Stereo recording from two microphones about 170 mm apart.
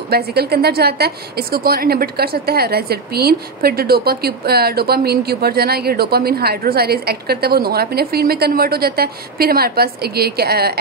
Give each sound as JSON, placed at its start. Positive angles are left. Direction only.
{"t": 0.1, "sound": "a woman's voice", "side_deg": -70}